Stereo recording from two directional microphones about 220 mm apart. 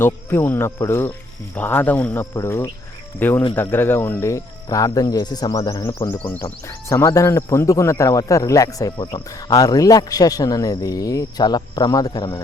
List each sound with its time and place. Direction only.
0.0 s speech: 10° left (ahead or behind)